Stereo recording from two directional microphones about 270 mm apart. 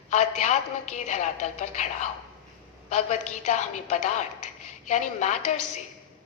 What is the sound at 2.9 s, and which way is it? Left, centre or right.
A woman's voice, left.